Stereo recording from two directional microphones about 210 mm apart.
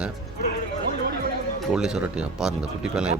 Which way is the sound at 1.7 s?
5° right (ahead or behind).